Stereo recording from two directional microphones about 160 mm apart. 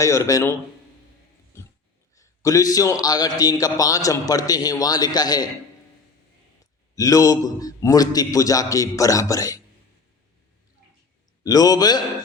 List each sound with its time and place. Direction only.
0.0 s a man's voice: 20° left (ahead or behind)
1.5 s a sound: 15° left (ahead or behind)
2.1 s a man's voice: 20° left (ahead or behind)
6.9 s a man's voice: 20° left (ahead or behind)
11.4 s a man's voice: 25° left (ahead or behind)